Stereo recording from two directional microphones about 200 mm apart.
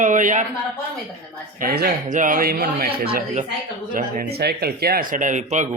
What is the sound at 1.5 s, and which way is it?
Speech, 50° right (ahead or behind).